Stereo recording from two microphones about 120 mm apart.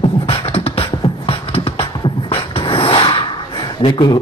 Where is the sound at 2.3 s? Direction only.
50° left (ahead or behind).